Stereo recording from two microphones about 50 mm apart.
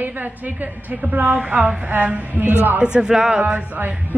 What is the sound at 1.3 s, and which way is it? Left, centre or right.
Speech, right.